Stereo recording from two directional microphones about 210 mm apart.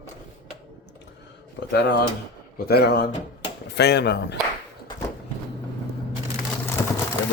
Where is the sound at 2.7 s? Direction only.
50° left (ahead or behind).